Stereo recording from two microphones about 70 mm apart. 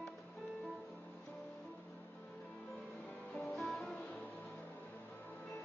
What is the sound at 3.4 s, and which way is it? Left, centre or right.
Music, centre.